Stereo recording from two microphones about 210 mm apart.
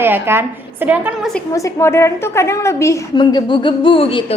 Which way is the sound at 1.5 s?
15° left (ahead or behind).